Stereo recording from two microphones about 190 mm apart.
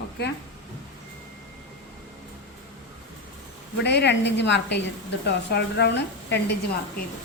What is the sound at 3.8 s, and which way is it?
A woman's voice, 60° left (ahead or behind).